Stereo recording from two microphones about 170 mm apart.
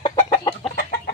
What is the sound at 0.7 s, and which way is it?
Chicken, 60° left (ahead or behind).